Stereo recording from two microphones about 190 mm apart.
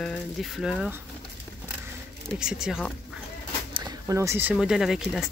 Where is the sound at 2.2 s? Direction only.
5° right (ahead or behind).